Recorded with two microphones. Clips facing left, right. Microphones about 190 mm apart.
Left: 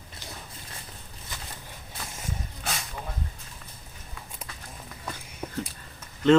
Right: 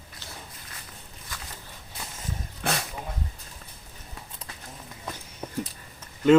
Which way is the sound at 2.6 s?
65° right (ahead or behind).